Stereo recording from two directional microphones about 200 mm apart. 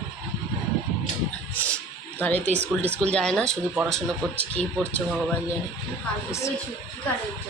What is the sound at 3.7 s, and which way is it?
Speech, 5° right (ahead or behind).